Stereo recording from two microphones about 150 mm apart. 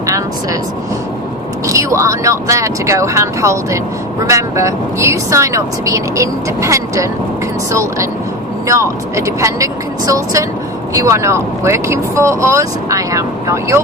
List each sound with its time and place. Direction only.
1.6 s speech: 20° right (ahead or behind)